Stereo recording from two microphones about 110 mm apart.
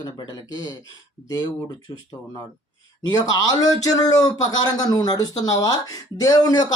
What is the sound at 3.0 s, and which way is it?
A man's voice, 35° left (ahead or behind).